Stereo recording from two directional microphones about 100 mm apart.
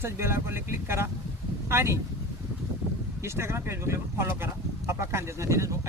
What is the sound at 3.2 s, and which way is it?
Speech, 25° right (ahead or behind).